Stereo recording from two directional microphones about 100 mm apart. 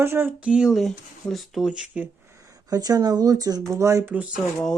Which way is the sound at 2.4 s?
40° right (ahead or behind).